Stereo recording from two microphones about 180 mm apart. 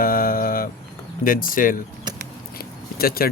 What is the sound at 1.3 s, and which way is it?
Cutlery, 50° left (ahead or behind).